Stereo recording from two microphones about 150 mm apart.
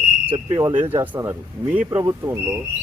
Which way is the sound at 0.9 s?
15° right (ahead or behind).